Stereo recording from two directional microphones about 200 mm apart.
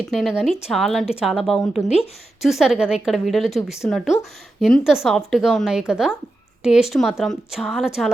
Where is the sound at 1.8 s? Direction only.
30° left (ahead or behind).